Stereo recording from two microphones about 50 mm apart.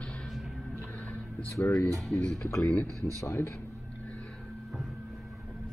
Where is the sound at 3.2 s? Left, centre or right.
Left.